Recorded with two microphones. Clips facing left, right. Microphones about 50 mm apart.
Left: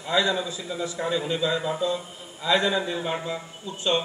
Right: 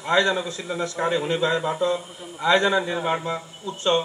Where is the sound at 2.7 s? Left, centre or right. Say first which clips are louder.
Right 4 dB; right.